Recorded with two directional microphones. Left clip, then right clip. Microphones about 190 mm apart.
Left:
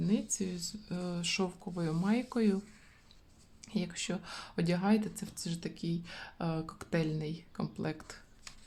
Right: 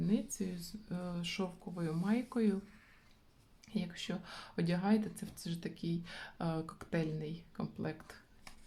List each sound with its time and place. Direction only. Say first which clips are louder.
0.0 s speech: left 3 dB; 15° left (ahead or behind)
3.6 s speech: left 4 dB; 20° left (ahead or behind)